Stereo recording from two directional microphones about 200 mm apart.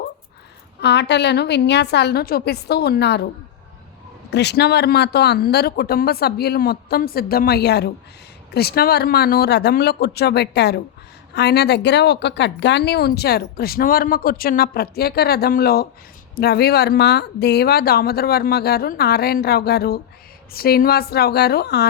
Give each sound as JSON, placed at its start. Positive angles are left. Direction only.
{"t": 0.8, "sound": "a woman's voice", "side_deg": 60}
{"t": 4.3, "sound": "speech", "side_deg": 55}